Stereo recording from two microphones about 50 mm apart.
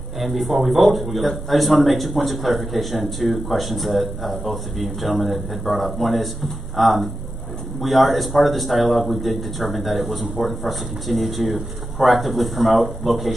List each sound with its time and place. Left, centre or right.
0.2 s a man's voice: centre